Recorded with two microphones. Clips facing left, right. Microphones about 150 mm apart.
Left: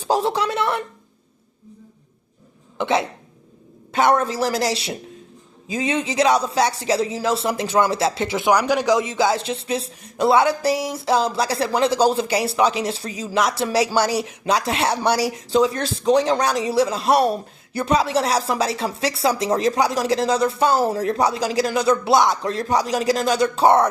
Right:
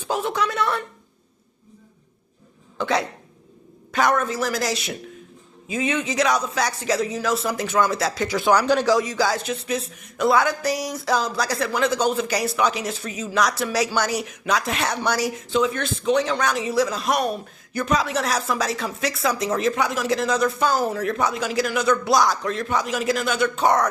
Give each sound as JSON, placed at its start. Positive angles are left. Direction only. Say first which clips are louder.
{"t": 0.0, "sound": "speech", "louder": "left 4 dB", "side_deg": 35}
{"t": 2.7, "sound": "speech", "louder": "left 2 dB", "side_deg": 25}
{"t": 8.4, "sound": "speech", "louder": "even", "side_deg": 10}